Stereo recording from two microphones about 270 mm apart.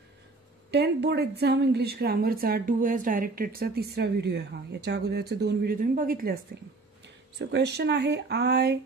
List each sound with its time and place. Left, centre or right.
0.7 s a woman's voice: right
7.3 s a woman's voice: right